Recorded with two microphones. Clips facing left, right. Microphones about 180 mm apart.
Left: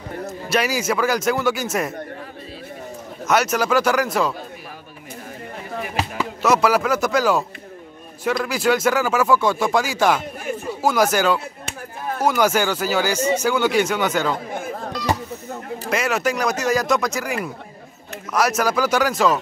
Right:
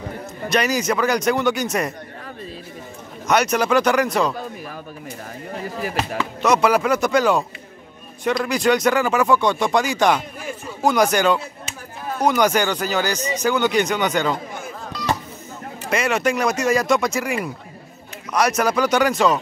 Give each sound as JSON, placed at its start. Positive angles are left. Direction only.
{"t": 0.5, "sound": "speech", "side_deg": 5}
{"t": 3.3, "sound": "speech", "side_deg": 5}
{"t": 6.4, "sound": "speech", "side_deg": 5}
{"t": 15.9, "sound": "speech", "side_deg": 0}